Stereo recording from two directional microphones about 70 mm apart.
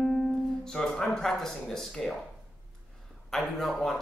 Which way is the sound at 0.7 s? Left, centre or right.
Centre.